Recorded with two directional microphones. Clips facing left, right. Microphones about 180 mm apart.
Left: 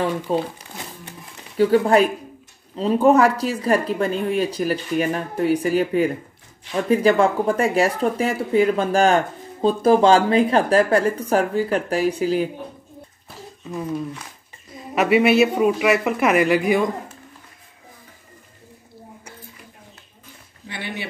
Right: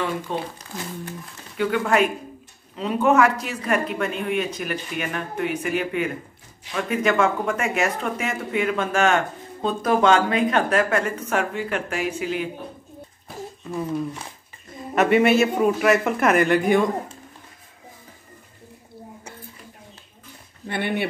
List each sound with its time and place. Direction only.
0.3 s speech: 35° left (ahead or behind)
1.6 s speech: 35° left (ahead or behind)
15.0 s a man's voice: 5° left (ahead or behind)
20.6 s speech: 55° right (ahead or behind)